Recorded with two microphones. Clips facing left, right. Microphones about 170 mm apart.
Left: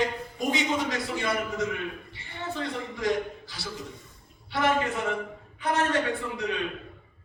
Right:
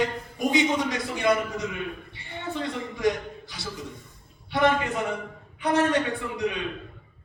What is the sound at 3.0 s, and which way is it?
Speech, 20° right (ahead or behind).